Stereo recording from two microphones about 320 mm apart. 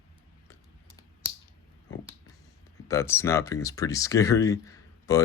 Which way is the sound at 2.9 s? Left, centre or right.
Centre.